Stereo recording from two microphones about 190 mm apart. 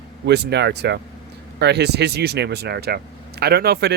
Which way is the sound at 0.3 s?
60° right (ahead or behind).